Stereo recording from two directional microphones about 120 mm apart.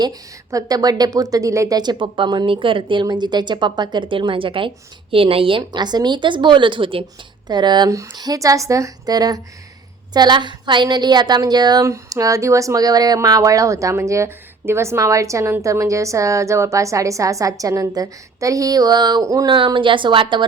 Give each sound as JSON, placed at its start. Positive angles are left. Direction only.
{"t": 0.0, "sound": "a woman's voice", "side_deg": -30}
{"t": 19.5, "sound": "a woman's voice", "side_deg": -40}